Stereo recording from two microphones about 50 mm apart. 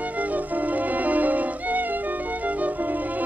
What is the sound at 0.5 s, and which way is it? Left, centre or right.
Music, right.